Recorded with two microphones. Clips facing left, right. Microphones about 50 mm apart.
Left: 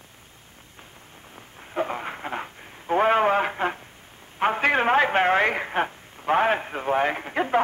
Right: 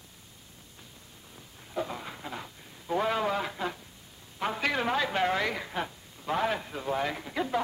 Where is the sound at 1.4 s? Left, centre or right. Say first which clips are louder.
Left 6 dB; left.